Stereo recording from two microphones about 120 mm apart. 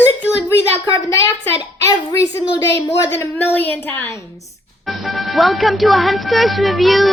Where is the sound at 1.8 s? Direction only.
30° left (ahead or behind).